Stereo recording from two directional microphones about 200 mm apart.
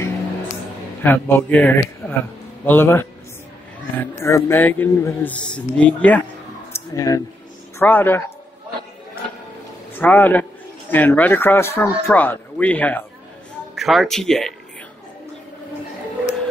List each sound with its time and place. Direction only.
1.0 s speech: 10° left (ahead or behind)
6.7 s a sound: 15° left (ahead or behind)
7.8 s speech: 10° left (ahead or behind)
9.9 s speech: 10° left (ahead or behind)